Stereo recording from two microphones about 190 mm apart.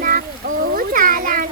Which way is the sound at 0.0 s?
45° right (ahead or behind).